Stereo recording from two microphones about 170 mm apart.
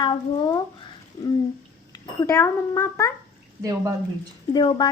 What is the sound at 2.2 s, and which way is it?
Speech, 20° left (ahead or behind).